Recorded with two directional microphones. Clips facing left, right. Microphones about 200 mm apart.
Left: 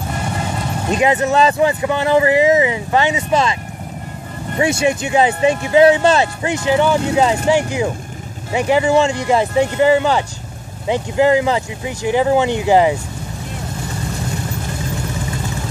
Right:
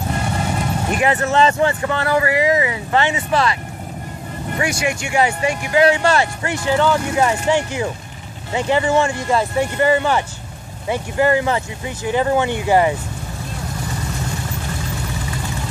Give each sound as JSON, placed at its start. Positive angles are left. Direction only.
{"t": 0.8, "sound": "speech", "side_deg": 20}
{"t": 4.6, "sound": "speech", "side_deg": 25}